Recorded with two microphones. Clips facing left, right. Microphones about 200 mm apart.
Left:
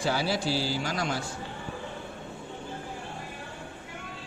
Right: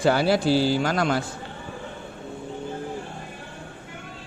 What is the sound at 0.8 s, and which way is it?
Speech, 60° right (ahead or behind).